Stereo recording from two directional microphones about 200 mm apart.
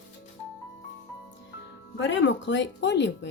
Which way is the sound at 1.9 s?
65° left (ahead or behind).